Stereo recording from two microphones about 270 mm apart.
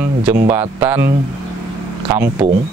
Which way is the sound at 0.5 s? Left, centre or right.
Centre.